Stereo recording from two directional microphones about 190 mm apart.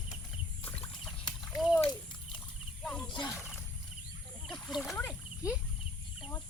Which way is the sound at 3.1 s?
25° left (ahead or behind).